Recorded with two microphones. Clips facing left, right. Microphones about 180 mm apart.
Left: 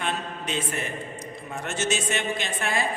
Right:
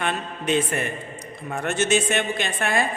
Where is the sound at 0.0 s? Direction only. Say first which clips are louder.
Right 3 dB; 55° right (ahead or behind).